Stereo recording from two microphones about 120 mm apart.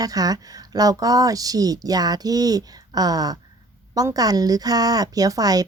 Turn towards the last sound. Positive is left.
turn(degrees=-30)  # may be behind; listen again after turning